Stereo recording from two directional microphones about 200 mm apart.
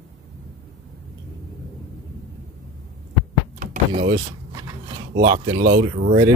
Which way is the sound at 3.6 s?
40° right (ahead or behind).